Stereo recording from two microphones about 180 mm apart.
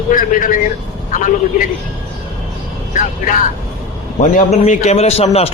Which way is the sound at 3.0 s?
45° left (ahead or behind).